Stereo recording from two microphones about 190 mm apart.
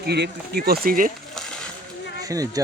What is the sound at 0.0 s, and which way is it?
Speech, 60° right (ahead or behind).